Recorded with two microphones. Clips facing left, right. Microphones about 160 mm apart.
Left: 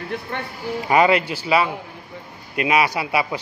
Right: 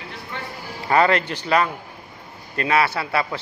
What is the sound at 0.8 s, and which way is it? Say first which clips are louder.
A man's voice: left 1 dB; 10° left (ahead or behind).